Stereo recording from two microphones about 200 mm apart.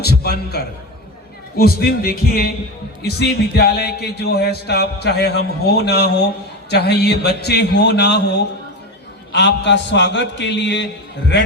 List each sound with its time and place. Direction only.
0.0 s a man's voice: 55° left (ahead or behind)
9.3 s speech: 60° left (ahead or behind)